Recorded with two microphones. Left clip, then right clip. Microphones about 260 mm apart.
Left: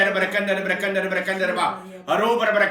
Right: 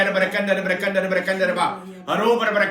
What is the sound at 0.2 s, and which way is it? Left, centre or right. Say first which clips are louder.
A man's voice: right 2 dB; centre.